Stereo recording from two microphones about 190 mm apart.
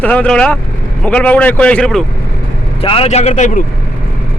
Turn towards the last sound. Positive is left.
turn(degrees=40)  # may be behind; listen again after turning